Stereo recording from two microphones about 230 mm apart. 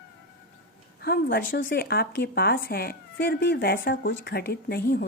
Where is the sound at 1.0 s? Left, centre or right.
Left.